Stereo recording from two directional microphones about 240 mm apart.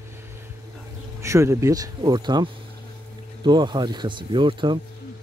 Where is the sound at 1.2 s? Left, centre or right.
Centre.